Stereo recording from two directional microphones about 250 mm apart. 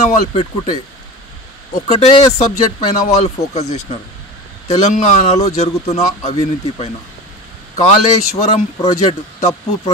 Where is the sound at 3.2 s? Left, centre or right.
Left.